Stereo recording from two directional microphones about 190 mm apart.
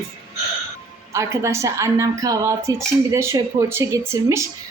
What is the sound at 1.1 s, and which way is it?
A woman's voice, 15° right (ahead or behind).